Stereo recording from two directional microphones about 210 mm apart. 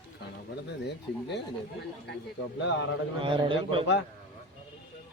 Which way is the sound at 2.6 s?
55° left (ahead or behind).